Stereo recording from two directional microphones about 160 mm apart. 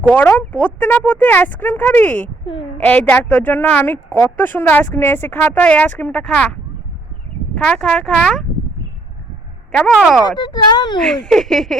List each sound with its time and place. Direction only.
0.1 s speech: 10° left (ahead or behind)
9.7 s speech: 5° left (ahead or behind)
10.2 s speech: 25° left (ahead or behind)
11.0 s speech: 5° left (ahead or behind)